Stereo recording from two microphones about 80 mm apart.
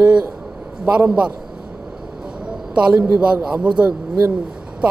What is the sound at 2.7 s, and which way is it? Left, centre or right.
A man's voice, centre.